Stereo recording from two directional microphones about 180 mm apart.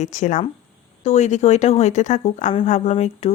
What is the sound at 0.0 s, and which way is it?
Speech, 40° left (ahead or behind).